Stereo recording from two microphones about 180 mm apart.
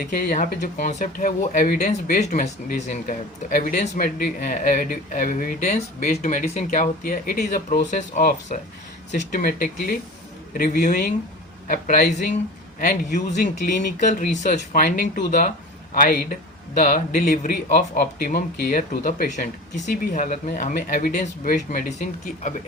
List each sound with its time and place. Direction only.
0.0 s a man's voice: 60° left (ahead or behind)
1.9 s a man's voice: 40° left (ahead or behind); by 13.5 s 60° left (ahead or behind)
14.1 s a man's voice: 45° left (ahead or behind)